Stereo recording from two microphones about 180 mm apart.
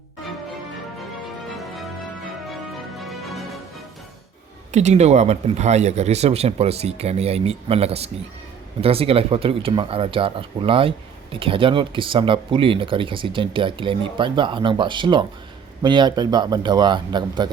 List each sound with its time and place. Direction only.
3.0 s music: centre (ahead or behind)
4.7 s speech: 40° right (ahead or behind); by 17.5 s 25° right (ahead or behind)